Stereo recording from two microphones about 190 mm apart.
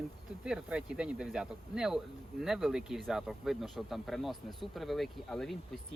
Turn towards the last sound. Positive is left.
turn(degrees=0)  # may be behind; listen again after turning